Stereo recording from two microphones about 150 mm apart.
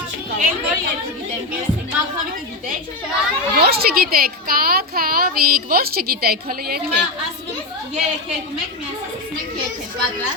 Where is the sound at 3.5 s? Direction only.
90° right.